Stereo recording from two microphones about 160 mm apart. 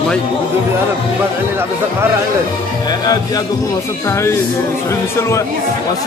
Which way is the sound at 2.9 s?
25° left (ahead or behind).